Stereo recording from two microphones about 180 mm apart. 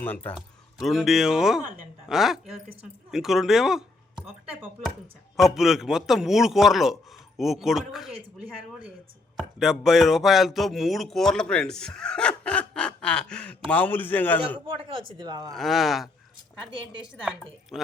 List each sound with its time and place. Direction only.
0.0 s speech: 10° left (ahead or behind)
5.4 s speech: centre (ahead or behind)
9.4 s speech: centre (ahead or behind)
14.7 s speech: 30° right (ahead or behind)
15.5 s speech: centre (ahead or behind)
17.7 s speech: centre (ahead or behind)